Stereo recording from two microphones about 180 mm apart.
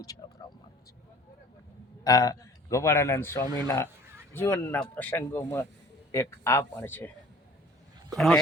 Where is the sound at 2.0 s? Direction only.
20° left (ahead or behind).